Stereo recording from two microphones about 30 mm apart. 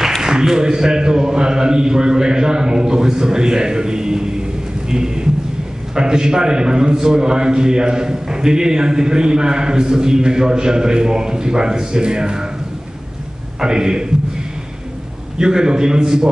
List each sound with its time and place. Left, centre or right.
0.2 s a man's voice: right
13.6 s a man's voice: right
15.3 s a man's voice: right